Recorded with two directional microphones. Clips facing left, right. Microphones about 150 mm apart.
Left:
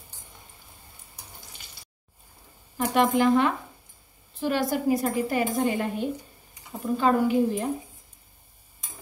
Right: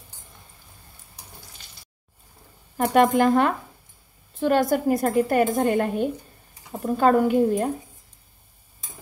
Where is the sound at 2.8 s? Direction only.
50° right (ahead or behind).